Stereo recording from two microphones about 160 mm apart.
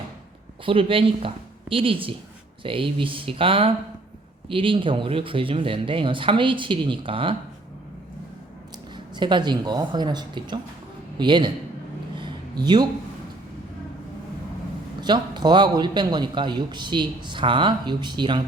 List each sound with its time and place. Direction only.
0.6 s speech: 35° right (ahead or behind)
9.1 s a man's voice: 30° right (ahead or behind)
12.2 s a sound: 25° right (ahead or behind)
15.0 s a man's voice: 25° right (ahead or behind)